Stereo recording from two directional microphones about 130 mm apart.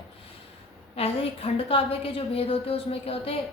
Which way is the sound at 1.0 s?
45° left (ahead or behind).